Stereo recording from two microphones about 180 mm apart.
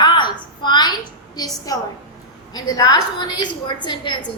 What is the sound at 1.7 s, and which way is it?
A woman's voice, 20° left (ahead or behind).